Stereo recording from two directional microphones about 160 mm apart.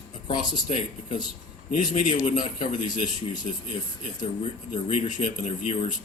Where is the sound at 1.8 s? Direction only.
55° left (ahead or behind).